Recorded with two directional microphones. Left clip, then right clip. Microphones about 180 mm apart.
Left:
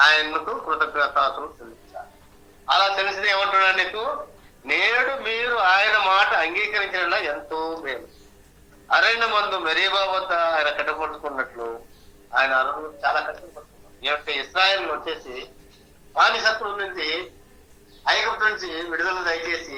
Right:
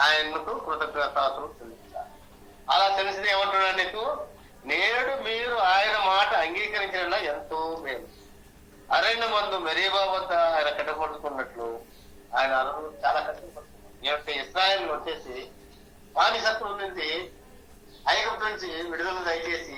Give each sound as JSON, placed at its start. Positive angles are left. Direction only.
{"t": 0.0, "sound": "a man's voice", "side_deg": 25}
{"t": 1.9, "sound": "a sound", "side_deg": 25}
{"t": 2.6, "sound": "a man's voice", "side_deg": 25}